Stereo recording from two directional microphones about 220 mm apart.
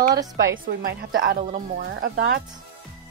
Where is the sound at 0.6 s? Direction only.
45° right (ahead or behind).